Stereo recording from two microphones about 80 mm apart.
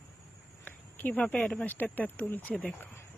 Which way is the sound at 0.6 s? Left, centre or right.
Centre.